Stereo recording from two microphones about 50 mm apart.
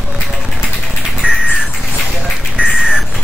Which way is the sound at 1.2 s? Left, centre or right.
Right.